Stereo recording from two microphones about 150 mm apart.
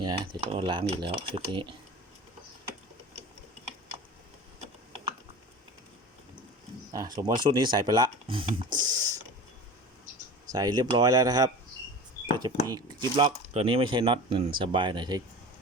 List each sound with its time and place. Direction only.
0.0 s speech: 30° right (ahead or behind)
6.9 s speech: 25° right (ahead or behind)
10.5 s speech: 25° right (ahead or behind)